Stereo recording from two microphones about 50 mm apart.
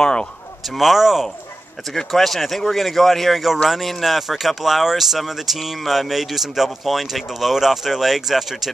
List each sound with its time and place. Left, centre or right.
0.0 s speech: centre
0.7 s speech: centre
2.0 s speech: centre